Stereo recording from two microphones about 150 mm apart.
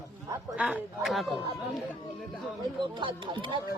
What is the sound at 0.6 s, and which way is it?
Speech, 10° right (ahead or behind).